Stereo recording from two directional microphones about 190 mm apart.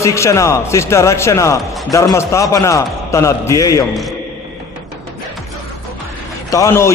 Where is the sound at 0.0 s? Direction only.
15° left (ahead or behind).